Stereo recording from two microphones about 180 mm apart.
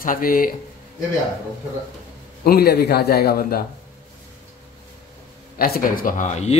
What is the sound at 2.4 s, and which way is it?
A man's voice, 55° left (ahead or behind).